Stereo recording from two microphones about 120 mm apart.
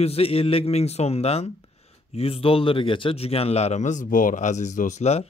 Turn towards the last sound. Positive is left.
turn(degrees=65)  # may be behind; listen again after turning